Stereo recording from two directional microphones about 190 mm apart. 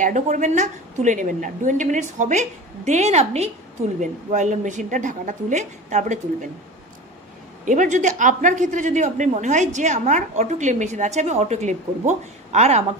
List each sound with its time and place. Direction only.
0.0 s speech: 40° right (ahead or behind)
7.6 s speech: 40° right (ahead or behind)